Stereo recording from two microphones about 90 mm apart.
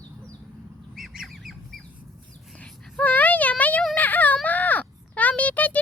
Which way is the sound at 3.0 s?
20° left (ahead or behind).